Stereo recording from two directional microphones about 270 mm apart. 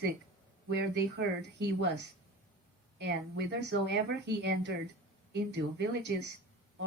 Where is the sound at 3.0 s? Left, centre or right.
Right.